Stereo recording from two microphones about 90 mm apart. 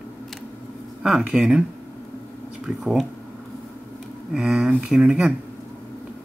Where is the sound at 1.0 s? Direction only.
5° right (ahead or behind).